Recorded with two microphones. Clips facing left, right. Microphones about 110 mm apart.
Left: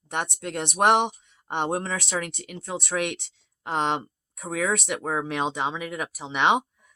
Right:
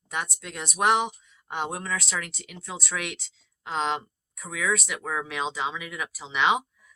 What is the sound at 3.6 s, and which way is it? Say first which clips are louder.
Speech: left 2 dB; 55° left (ahead or behind).